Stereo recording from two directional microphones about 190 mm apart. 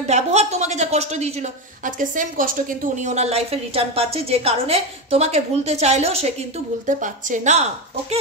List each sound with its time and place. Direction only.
0.0 s a woman's voice: 35° right (ahead or behind)